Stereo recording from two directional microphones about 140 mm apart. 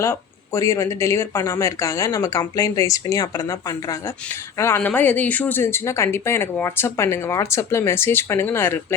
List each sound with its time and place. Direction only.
0.0 s speech: 20° left (ahead or behind)